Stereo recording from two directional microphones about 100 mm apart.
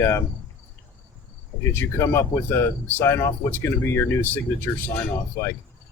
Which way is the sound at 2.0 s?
25° left (ahead or behind).